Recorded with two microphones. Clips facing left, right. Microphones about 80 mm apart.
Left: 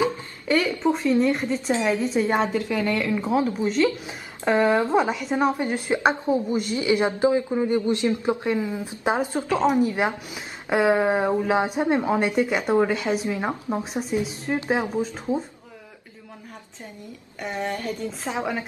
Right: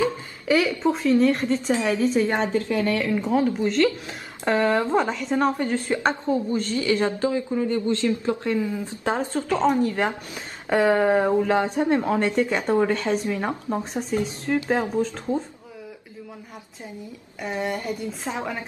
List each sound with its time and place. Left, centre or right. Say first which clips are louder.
0.5 s a woman's voice: right 1 dB; centre
3.2 s speech: right 1 dB; centre
3.6 s a woman's voice: right 1 dB; centre
17.4 s a woman's voice: right 1 dB; centre